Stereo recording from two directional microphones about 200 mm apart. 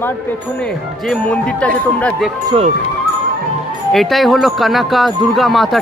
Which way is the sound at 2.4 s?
30° right (ahead or behind).